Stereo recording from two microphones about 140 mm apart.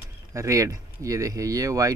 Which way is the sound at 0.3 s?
20° right (ahead or behind).